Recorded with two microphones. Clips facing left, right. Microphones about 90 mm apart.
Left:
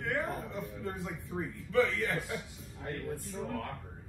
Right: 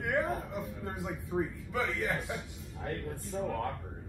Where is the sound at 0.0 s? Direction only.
15° right (ahead or behind).